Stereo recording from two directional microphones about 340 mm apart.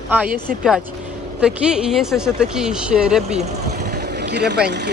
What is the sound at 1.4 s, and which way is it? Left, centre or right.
Speech, centre.